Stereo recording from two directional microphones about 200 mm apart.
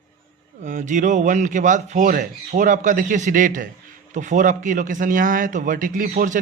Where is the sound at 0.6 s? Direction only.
40° right (ahead or behind).